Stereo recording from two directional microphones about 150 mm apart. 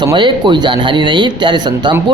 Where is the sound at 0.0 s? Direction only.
30° right (ahead or behind).